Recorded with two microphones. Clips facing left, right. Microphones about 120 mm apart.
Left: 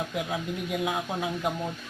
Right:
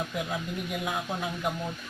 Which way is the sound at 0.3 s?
20° left (ahead or behind).